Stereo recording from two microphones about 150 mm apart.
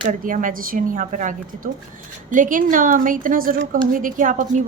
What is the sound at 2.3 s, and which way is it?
A woman's voice, 60° right (ahead or behind).